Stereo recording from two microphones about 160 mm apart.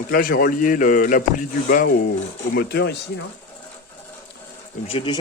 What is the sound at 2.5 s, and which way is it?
Speech, 90° left.